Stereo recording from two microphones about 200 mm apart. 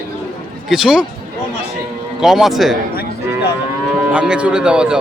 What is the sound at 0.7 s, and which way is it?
Speech, 5° right (ahead or behind).